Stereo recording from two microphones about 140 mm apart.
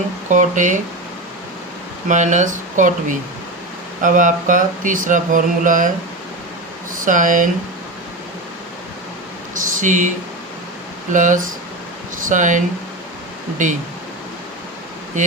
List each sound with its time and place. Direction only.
0.3 s speech: 65° right (ahead or behind)
2.0 s speech: 60° right (ahead or behind)
6.9 s speech: 70° right (ahead or behind)
9.8 s speech: 65° right (ahead or behind)
11.1 s speech: 65° right (ahead or behind)